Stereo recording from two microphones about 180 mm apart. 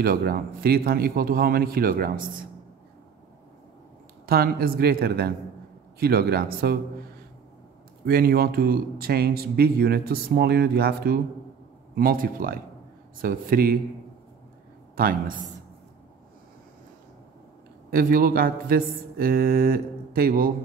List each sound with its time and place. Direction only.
0.0 s speech: 55° right (ahead or behind)
4.3 s speech: 55° right (ahead or behind)
8.0 s speech: 55° right (ahead or behind)
15.0 s speech: 50° right (ahead or behind)
17.9 s speech: 55° right (ahead or behind)